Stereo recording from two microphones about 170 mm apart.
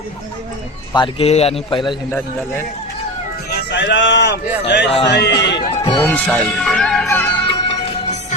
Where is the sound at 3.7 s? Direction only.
90° left.